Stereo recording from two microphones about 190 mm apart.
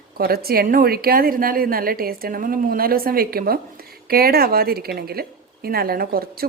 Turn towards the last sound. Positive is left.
turn(degrees=-50)  # may be behind; listen again after turning